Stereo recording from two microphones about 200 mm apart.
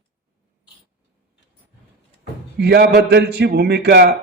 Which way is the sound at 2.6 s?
55° right (ahead or behind).